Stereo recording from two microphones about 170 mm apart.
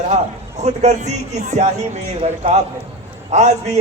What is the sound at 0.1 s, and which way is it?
A man's voice, 40° right (ahead or behind).